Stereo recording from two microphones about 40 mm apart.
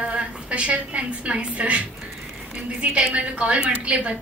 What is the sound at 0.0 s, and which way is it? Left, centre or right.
A woman's voice, right.